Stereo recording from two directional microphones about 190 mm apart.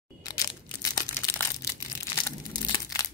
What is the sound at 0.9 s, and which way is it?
Crushing, 15° left (ahead or behind).